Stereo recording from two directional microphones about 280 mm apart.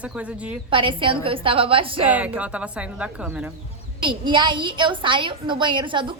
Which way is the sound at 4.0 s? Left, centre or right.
Centre.